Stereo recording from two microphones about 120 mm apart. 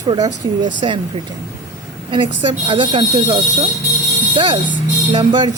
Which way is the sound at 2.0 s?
45° right (ahead or behind).